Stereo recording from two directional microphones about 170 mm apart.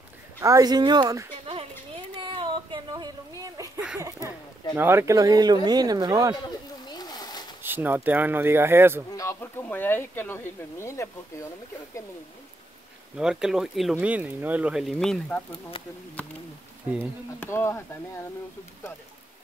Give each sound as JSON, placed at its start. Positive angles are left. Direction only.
{"t": 0.4, "sound": "speech", "side_deg": -20}
{"t": 1.4, "sound": "a sound", "side_deg": -35}
{"t": 4.7, "sound": "speech", "side_deg": -15}
{"t": 6.4, "sound": "a sound", "side_deg": 25}
{"t": 7.6, "sound": "speech", "side_deg": -10}
{"t": 9.1, "sound": "speech", "side_deg": 15}
{"t": 13.2, "sound": "speech", "side_deg": -5}
{"t": 17.4, "sound": "speech", "side_deg": 15}